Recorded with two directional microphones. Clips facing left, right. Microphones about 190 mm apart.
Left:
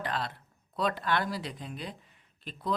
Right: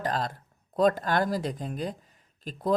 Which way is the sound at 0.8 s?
45° right (ahead or behind).